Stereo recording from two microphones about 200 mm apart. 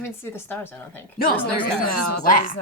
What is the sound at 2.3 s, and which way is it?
Speech, 40° left (ahead or behind).